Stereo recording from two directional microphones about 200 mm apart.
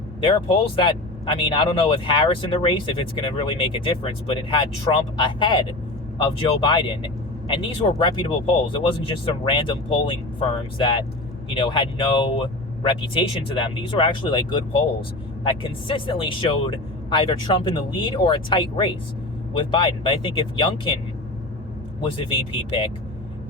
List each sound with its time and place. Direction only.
0.2 s speech: 25° left (ahead or behind)
22.2 s speech: 25° left (ahead or behind)